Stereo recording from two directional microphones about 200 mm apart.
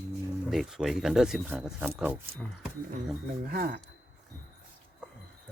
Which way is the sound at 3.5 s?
45° right (ahead or behind).